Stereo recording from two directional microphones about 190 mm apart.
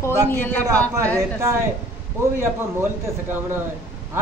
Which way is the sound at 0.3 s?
10° left (ahead or behind).